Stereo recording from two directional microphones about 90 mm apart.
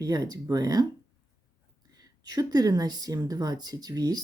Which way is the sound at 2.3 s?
45° right (ahead or behind).